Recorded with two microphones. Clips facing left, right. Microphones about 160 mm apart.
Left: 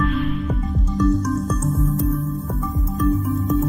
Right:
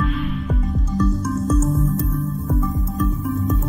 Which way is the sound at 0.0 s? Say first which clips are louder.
Left 2 dB; centre (ahead or behind).